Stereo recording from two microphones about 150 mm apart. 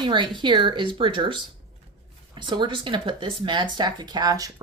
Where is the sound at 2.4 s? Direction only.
30° right (ahead or behind).